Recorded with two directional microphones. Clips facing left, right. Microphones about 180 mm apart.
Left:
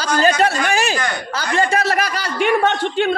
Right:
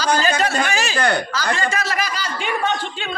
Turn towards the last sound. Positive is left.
turn(degrees=65)  # may be behind; listen again after turning